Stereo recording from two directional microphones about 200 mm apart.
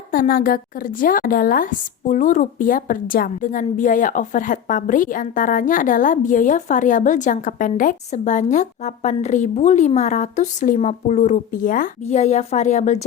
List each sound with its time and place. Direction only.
0.1 s speech: 45° left (ahead or behind)